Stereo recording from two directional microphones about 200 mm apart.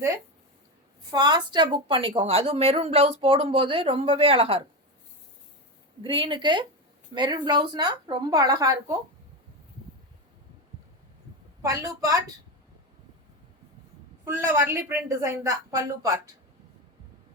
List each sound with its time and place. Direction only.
1.1 s a woman's voice: 20° right (ahead or behind)
6.0 s a woman's voice: 25° right (ahead or behind)
11.6 s a woman's voice: 15° right (ahead or behind)
14.3 s a woman's voice: 15° right (ahead or behind)